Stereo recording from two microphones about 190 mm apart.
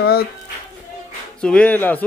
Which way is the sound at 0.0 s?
55° left (ahead or behind).